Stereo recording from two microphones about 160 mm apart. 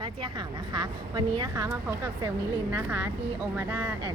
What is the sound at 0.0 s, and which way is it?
A woman's voice, 30° right (ahead or behind).